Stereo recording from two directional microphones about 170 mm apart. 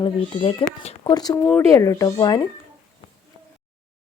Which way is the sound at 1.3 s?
10° left (ahead or behind).